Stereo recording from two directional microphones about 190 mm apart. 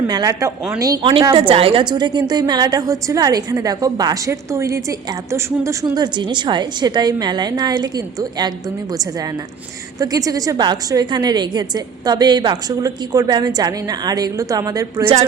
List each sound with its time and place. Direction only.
0.1 s a woman's voice: 20° right (ahead or behind)
1.3 s a woman's voice: 30° right (ahead or behind)